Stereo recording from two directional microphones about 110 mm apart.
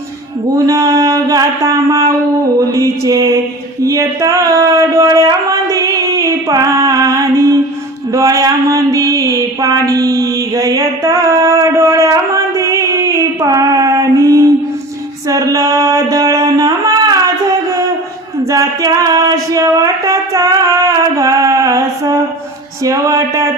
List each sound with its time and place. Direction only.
0.5 s mantra: 30° right (ahead or behind)
3.8 s a sound: 30° right (ahead or behind)
22.8 s mantra: 30° right (ahead or behind)